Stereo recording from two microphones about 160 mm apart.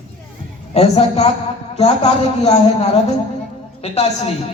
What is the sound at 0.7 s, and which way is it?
A man's voice, 40° left (ahead or behind).